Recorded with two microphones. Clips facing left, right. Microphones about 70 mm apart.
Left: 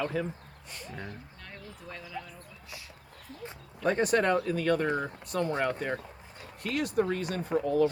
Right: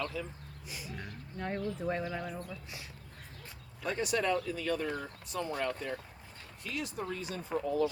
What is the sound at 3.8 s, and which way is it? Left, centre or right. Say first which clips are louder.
Speech: left 6 dB; left.